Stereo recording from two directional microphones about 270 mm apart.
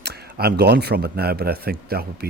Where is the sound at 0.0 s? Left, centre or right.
Right.